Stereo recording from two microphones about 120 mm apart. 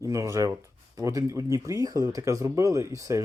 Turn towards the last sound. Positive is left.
turn(degrees=-25)  # may be behind; listen again after turning